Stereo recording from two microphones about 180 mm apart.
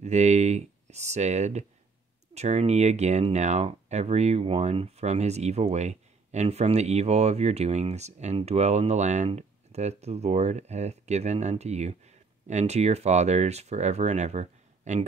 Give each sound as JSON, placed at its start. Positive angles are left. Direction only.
{"t": 0.0, "sound": "speech", "side_deg": -40}